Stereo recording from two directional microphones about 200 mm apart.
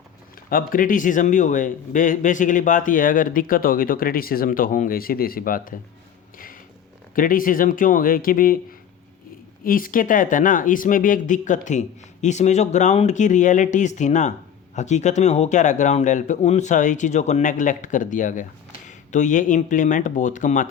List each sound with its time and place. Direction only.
0.5 s a man's voice: 45° left (ahead or behind)
7.2 s a man's voice: 45° left (ahead or behind)
9.6 s speech: 45° left (ahead or behind)